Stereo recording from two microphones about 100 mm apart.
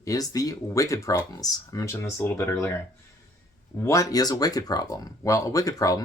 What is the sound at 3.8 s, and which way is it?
Speech, 35° left (ahead or behind).